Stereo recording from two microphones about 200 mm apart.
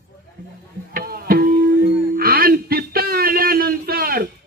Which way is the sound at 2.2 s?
45° right (ahead or behind).